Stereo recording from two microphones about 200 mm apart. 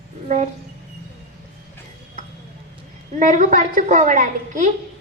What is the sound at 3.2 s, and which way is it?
A woman's voice, 40° right (ahead or behind).